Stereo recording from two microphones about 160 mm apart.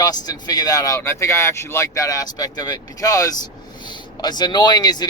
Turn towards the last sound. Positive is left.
turn(degrees=25)  # may be behind; listen again after turning